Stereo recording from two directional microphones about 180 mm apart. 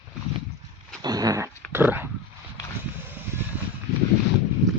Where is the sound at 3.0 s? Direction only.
10° right (ahead or behind).